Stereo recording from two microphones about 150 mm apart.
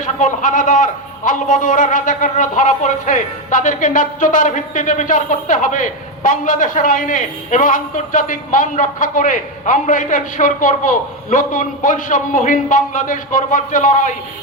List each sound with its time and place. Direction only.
0.0 s a man's voice: 55° left (ahead or behind)